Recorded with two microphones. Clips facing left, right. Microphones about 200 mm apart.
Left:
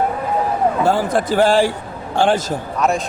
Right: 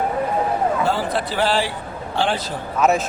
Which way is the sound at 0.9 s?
50° left (ahead or behind).